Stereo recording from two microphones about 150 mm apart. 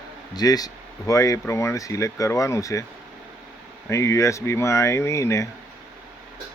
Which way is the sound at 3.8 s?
20° left (ahead or behind).